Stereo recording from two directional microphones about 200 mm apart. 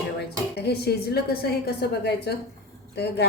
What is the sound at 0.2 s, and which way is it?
A woman's voice, 55° left (ahead or behind).